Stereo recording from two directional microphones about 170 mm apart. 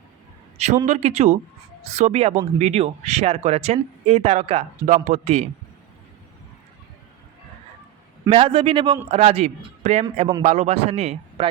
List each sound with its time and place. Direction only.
0.5 s a man's voice: 40° right (ahead or behind)
8.3 s speech: 35° right (ahead or behind)